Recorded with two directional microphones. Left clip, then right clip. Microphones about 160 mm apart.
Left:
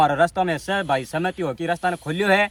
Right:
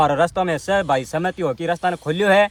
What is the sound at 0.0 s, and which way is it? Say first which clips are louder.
Speech: right 1 dB; 30° right (ahead or behind).